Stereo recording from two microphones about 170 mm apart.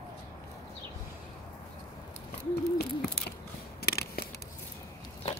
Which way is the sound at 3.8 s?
65° left (ahead or behind).